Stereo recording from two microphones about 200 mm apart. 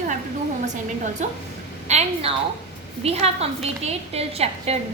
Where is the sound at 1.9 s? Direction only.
35° right (ahead or behind).